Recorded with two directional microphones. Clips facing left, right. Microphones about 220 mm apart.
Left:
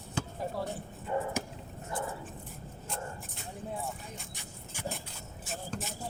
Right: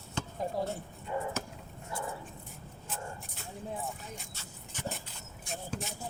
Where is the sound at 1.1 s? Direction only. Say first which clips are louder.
Left 3 dB; 45° left (ahead or behind).